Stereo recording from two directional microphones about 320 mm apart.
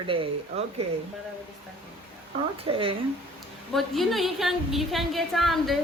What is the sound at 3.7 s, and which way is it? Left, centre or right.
A woman's voice, centre.